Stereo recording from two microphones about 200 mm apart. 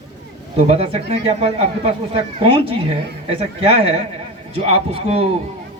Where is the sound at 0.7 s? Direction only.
30° right (ahead or behind).